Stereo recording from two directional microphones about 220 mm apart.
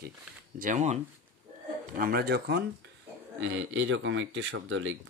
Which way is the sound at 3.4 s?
60° right (ahead or behind).